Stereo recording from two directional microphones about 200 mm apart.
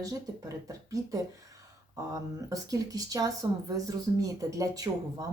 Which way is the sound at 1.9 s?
15° right (ahead or behind).